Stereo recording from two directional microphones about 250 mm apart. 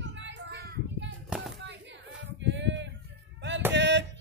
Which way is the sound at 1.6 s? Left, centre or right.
Right.